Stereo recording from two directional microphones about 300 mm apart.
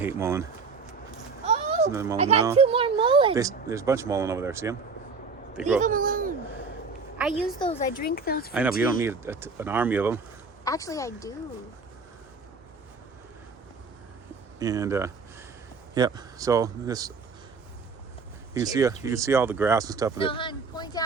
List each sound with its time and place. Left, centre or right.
0.0 s speech: centre
1.5 s a sound: right
1.9 s speech: centre
2.1 s speech: right
5.8 s speech: right
7.6 s speech: left
8.8 s speech: centre
10.6 s speech: centre
14.6 s speech: centre
18.6 s speech: centre
20.1 s speech: centre